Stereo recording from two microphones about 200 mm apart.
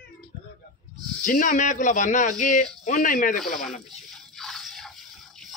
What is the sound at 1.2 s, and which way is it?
Speech, 40° left (ahead or behind).